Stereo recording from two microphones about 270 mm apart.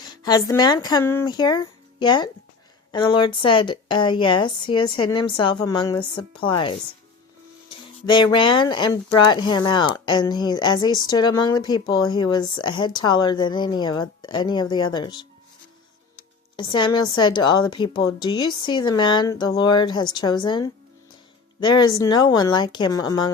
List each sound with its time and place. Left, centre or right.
0.0 s speech: centre
16.6 s speech: centre